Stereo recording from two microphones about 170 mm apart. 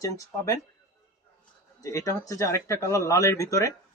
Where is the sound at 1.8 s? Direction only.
20° left (ahead or behind).